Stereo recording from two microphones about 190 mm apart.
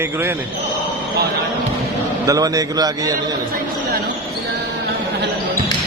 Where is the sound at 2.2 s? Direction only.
20° right (ahead or behind).